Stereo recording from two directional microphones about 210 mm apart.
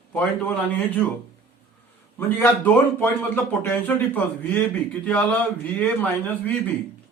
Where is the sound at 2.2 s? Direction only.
10° left (ahead or behind).